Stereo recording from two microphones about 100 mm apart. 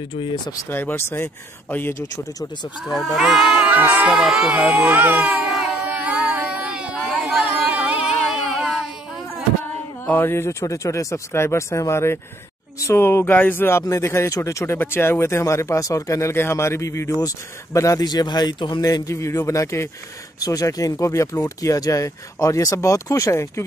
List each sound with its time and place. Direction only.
0.7 s speech: 20° left (ahead or behind)
2.9 s speech: centre (ahead or behind); by 4.1 s 15° right (ahead or behind)
4.1 s baby cry: 5° right (ahead or behind)
7.4 s a sound: 15° right (ahead or behind)
10.0 s speech: 20° left (ahead or behind); by 18.9 s 50° left (ahead or behind)
18.9 s speech: 35° left (ahead or behind)